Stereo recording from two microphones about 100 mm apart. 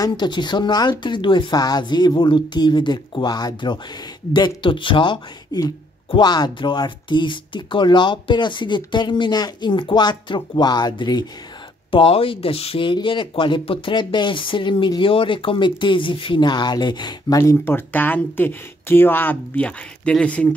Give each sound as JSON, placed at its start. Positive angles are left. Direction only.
{"t": 0.0, "sound": "speech", "side_deg": 45}
{"t": 11.9, "sound": "speech", "side_deg": 65}
{"t": 17.4, "sound": "speech", "side_deg": 25}